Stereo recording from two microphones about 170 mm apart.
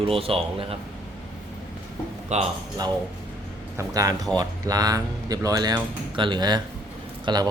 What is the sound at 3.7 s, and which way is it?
Speech, 20° right (ahead or behind).